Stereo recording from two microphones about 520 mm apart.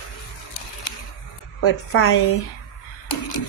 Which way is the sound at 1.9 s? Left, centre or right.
Left.